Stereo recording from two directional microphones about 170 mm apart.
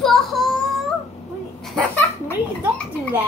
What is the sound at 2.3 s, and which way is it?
Child singing, 5° left (ahead or behind).